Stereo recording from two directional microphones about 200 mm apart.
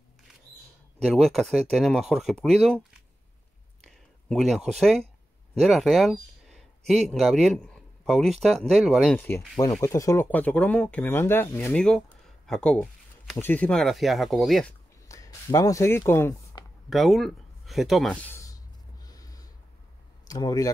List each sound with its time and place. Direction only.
1.0 s speech: centre (ahead or behind)
9.6 s speech: 15° left (ahead or behind)
15.0 s speech: 15° left (ahead or behind)
16.9 s a sound: centre (ahead or behind); by 19.5 s 20° left (ahead or behind)
20.2 s speech: 20° left (ahead or behind)